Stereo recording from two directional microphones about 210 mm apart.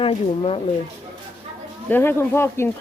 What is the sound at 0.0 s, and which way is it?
Speech, 25° left (ahead or behind).